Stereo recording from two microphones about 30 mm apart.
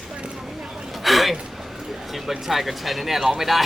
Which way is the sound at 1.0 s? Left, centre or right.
Centre.